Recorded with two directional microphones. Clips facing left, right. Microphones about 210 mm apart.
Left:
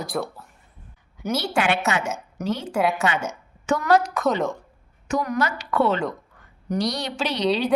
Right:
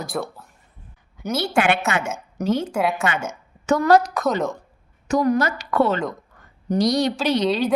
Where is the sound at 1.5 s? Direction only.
55° right (ahead or behind).